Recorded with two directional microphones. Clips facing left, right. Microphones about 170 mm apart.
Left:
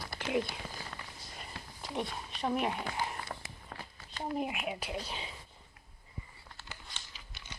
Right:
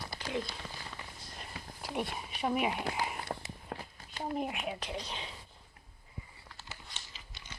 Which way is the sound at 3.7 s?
50° right (ahead or behind).